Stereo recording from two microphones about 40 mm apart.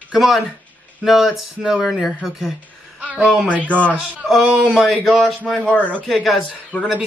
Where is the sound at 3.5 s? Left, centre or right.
Left.